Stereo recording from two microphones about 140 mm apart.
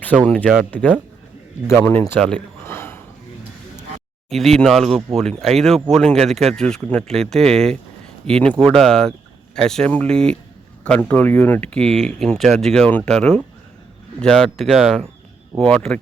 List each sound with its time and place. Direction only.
0.3 s a man's voice: 10° left (ahead or behind)
2.1 s speech: 5° left (ahead or behind)
2.6 s a sound: 15° left (ahead or behind)
4.3 s speech: centre (ahead or behind)